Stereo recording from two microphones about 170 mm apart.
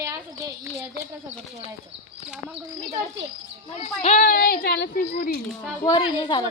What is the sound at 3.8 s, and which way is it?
Speech, 45° left (ahead or behind).